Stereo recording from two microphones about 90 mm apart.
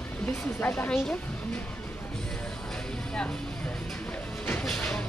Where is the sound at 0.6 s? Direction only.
20° left (ahead or behind).